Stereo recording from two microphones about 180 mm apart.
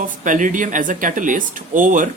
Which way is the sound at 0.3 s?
45° right (ahead or behind).